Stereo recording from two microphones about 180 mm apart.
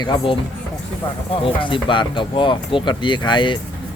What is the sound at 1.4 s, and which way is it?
Speech, 25° left (ahead or behind).